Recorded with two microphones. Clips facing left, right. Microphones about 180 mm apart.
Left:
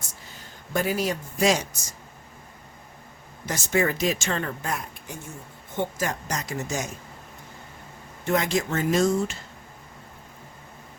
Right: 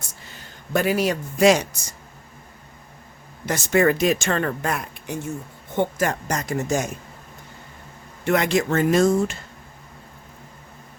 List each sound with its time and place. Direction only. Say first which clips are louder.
0.7 s a man's voice: right 5 dB; 70° right (ahead or behind)
3.4 s speech: right 6 dB; 65° right (ahead or behind)
5.7 s speech: right 6 dB; 60° right (ahead or behind)
8.2 s speech: right 4 dB; 70° right (ahead or behind); by 9.4 s 55° right (ahead or behind)